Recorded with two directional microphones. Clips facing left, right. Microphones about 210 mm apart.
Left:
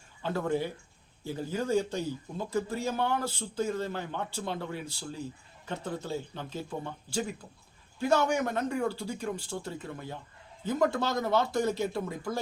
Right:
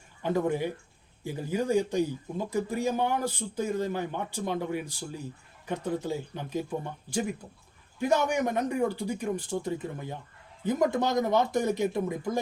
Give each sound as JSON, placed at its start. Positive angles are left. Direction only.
{"t": 0.2, "sound": "a man's voice", "side_deg": -15}